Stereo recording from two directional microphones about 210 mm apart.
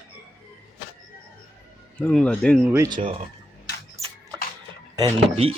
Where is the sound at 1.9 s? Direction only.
5° left (ahead or behind).